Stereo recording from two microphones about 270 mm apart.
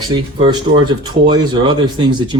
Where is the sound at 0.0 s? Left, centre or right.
Centre.